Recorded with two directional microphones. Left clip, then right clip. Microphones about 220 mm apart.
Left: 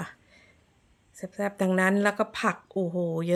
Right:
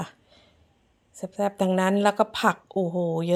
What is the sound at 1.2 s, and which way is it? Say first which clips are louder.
Speech: right 4 dB; 5° right (ahead or behind).